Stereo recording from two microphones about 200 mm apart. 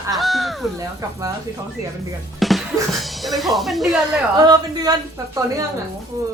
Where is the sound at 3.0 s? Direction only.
Centre (ahead or behind).